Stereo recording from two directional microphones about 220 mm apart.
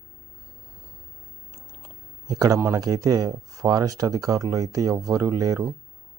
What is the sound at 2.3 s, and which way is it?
Speech, 15° right (ahead or behind).